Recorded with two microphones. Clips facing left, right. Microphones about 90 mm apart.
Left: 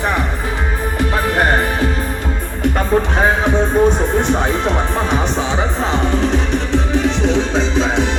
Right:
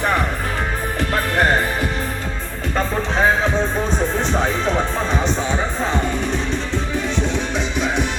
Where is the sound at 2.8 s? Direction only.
15° left (ahead or behind).